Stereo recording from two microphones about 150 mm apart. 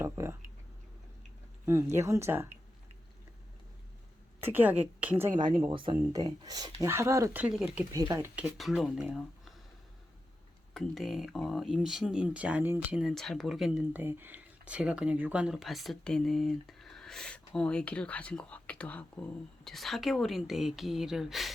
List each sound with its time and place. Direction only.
0.0 s a sound: 15° right (ahead or behind)
1.6 s a woman's voice: 20° right (ahead or behind)
4.4 s a woman's voice: 15° right (ahead or behind)
5.7 s speech: 35° right (ahead or behind)
6.1 s speech: 25° right (ahead or behind)
7.4 s a woman's voice: 5° right (ahead or behind)
7.9 s speech: 20° right (ahead or behind)
8.5 s speech: centre (ahead or behind)
10.8 s speech: centre (ahead or behind)